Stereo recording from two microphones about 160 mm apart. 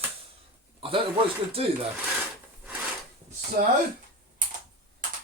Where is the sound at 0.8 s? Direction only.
35° right (ahead or behind).